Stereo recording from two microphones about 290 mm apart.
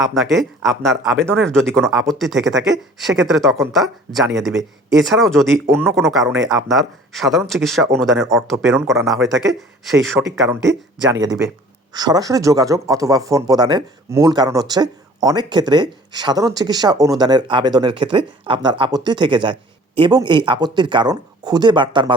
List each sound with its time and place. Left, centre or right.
0.1 s speech: centre